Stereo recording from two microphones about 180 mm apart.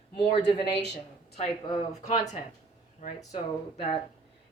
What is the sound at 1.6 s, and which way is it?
Speech, 25° left (ahead or behind).